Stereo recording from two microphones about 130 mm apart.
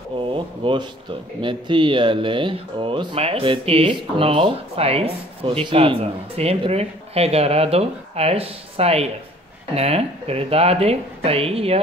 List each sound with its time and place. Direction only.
0.3 s speech: 40° right (ahead or behind)